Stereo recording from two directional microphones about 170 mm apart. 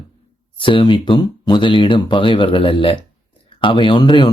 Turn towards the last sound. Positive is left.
turn(degrees=30)  # may be behind; listen again after turning